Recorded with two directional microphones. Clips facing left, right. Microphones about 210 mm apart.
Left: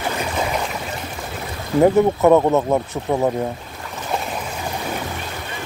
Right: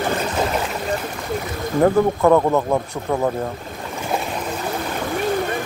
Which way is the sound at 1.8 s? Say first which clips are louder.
Left 2 dB; 15° left (ahead or behind).